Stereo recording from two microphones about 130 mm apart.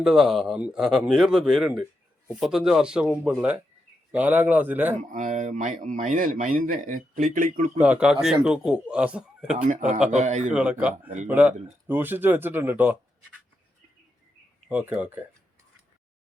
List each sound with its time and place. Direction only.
0.0 s a man's voice: 5° right (ahead or behind)
4.9 s speech: 65° right (ahead or behind); by 7.7 s 90° right
7.8 s a man's voice: 10° right (ahead or behind)
9.6 s speech: 75° right (ahead or behind)
10.5 s a man's voice: 10° right (ahead or behind)
14.7 s a man's voice: 15° right (ahead or behind)